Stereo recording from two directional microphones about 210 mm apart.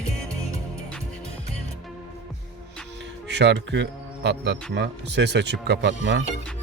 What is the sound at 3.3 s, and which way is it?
A man's voice, 55° right (ahead or behind).